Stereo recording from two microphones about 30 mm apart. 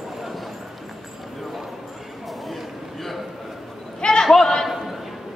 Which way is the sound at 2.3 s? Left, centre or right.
Centre.